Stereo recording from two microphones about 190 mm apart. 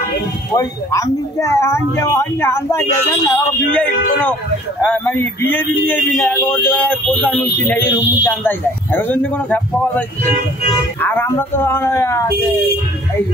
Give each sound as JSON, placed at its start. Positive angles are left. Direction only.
{"t": 0.6, "sound": "speech", "side_deg": 15}